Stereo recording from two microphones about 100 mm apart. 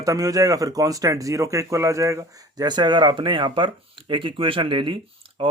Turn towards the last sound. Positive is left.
turn(degrees=-65)  # may be behind; listen again after turning